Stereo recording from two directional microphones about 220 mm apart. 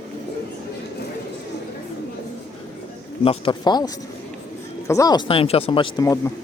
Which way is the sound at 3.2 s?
25° left (ahead or behind).